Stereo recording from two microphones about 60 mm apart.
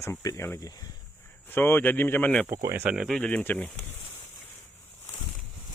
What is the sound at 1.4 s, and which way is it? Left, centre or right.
Speech, left.